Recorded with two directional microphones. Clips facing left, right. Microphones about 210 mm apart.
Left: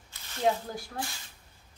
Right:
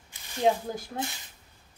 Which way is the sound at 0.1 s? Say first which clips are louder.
Right 3 dB; 15° right (ahead or behind).